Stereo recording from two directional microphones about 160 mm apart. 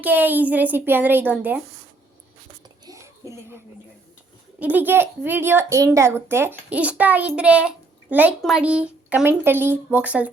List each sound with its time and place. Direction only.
0.0 s a child's voice: 10° right (ahead or behind)
2.8 s a sound: 20° right (ahead or behind)
4.6 s a child's voice: 10° right (ahead or behind)